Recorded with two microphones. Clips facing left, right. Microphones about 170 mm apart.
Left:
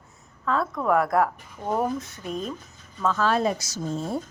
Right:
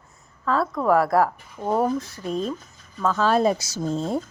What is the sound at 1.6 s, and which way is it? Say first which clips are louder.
Speech: right 3 dB; 20° right (ahead or behind).